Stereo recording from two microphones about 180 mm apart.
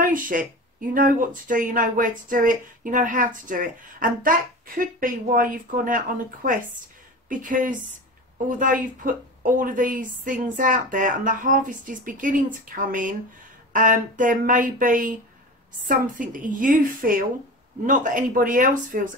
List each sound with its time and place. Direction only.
0.0 s speech: 50° right (ahead or behind)